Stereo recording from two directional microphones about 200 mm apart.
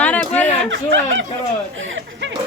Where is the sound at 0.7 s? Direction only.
65° right (ahead or behind).